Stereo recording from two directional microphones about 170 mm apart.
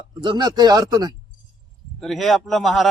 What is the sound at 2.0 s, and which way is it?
Speech, centre (ahead or behind).